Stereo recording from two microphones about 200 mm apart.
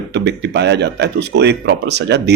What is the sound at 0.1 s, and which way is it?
Speech, 55° right (ahead or behind).